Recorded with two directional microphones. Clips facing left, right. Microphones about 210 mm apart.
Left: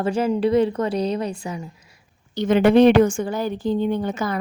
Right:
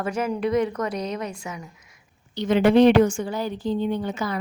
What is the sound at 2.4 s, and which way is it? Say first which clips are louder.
A woman's voice: left 2 dB; 50° left (ahead or behind).